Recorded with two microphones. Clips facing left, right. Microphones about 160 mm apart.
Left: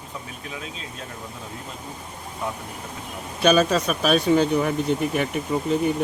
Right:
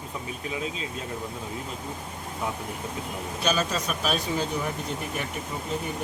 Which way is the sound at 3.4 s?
65° left (ahead or behind).